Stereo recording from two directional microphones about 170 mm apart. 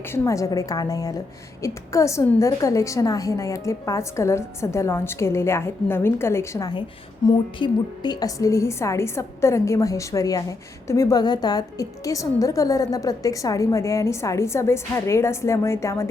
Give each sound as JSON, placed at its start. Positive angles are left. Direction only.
{"t": 0.0, "sound": "a woman's voice", "side_deg": 15}